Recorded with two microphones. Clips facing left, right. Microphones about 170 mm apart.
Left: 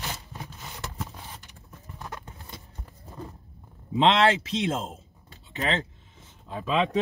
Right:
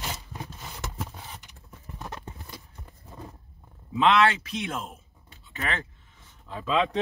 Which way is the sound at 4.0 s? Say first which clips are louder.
Left 1 dB; 25° left (ahead or behind).